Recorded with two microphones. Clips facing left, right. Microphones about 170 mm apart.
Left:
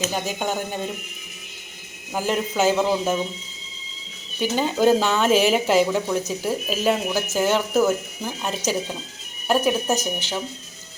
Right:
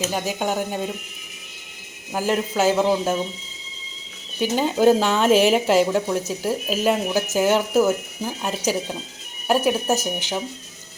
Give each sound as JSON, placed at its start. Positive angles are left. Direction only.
{"t": 0.0, "sound": "speech", "side_deg": -5}
{"t": 2.1, "sound": "speech", "side_deg": -5}
{"t": 4.4, "sound": "speech", "side_deg": -10}
{"t": 5.3, "sound": "a woman's voice", "side_deg": -45}
{"t": 5.5, "sound": "speech", "side_deg": -5}